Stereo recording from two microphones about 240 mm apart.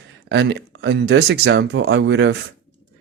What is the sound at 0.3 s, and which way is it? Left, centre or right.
Speech, right.